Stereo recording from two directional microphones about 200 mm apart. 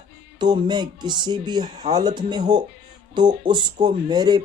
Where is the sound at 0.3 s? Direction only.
20° right (ahead or behind).